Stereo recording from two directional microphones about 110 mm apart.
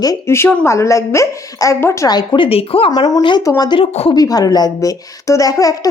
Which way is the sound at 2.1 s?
45° left (ahead or behind).